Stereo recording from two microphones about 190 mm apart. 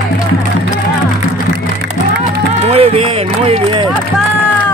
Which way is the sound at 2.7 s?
30° right (ahead or behind).